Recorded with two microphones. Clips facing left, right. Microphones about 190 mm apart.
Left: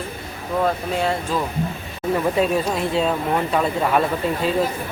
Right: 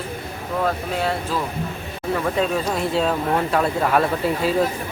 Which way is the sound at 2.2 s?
10° left (ahead or behind).